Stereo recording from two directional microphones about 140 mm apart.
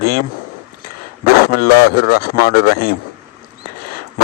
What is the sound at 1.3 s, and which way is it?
A man's voice, 90° left.